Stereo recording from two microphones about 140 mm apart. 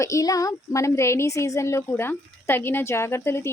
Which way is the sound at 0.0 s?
25° left (ahead or behind).